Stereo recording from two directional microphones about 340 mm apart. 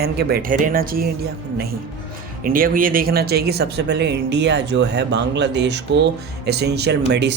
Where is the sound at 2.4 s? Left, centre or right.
Right.